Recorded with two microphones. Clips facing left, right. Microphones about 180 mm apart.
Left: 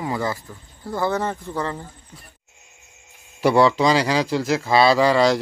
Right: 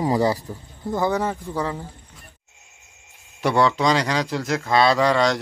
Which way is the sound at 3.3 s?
5° left (ahead or behind).